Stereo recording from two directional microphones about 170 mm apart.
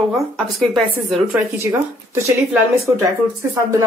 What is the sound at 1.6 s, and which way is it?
Speech, 15° right (ahead or behind).